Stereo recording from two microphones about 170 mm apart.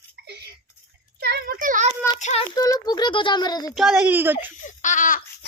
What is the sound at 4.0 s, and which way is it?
Speech, 10° right (ahead or behind).